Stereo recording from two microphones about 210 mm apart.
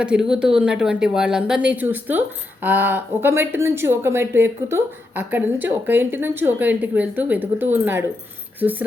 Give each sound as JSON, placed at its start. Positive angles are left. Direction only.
{"t": 0.0, "sound": "a woman's voice", "side_deg": -5}